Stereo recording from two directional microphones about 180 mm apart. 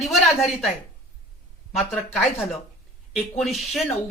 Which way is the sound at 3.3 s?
Centre (ahead or behind).